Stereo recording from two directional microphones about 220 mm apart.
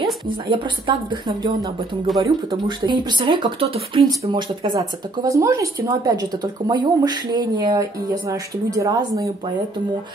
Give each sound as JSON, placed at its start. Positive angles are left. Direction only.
{"t": 0.3, "sound": "speech", "side_deg": -20}
{"t": 2.1, "sound": "speech", "side_deg": 0}
{"t": 2.9, "sound": "speech", "side_deg": -20}